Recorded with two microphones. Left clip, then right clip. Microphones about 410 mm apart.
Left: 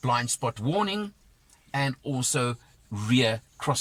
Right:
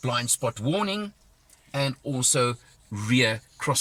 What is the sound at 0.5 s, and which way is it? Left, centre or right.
Speech, centre.